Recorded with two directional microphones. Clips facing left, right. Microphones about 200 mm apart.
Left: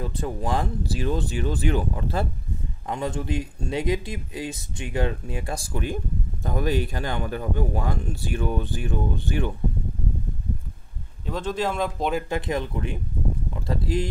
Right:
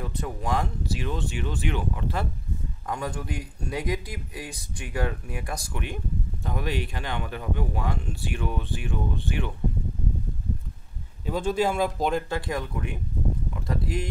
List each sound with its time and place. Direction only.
0.0 s speech: 30° left (ahead or behind)
2.9 s speech: 25° left (ahead or behind); by 9.5 s 40° left (ahead or behind)
11.2 s speech: 10° right (ahead or behind)
12.3 s speech: 20° left (ahead or behind)